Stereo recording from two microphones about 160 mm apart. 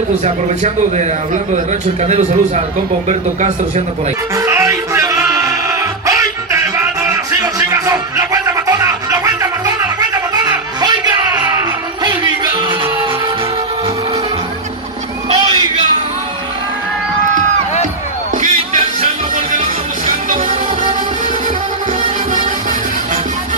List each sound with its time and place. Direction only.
0.9 s speech: 50° right (ahead or behind)
4.4 s music: 20° right (ahead or behind)
18.4 s music: 50° right (ahead or behind)